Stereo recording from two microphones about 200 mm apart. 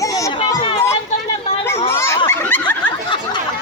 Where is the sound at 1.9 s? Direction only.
15° left (ahead or behind).